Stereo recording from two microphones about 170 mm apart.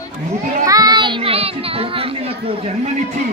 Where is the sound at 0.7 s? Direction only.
20° right (ahead or behind).